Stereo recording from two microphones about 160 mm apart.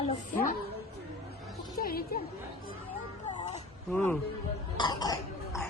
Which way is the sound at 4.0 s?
15° left (ahead or behind).